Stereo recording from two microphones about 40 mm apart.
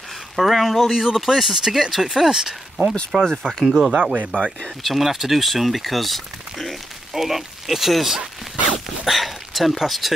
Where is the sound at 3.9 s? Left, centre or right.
Right.